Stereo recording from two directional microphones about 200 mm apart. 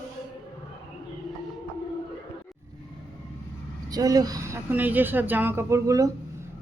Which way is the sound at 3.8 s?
20° right (ahead or behind).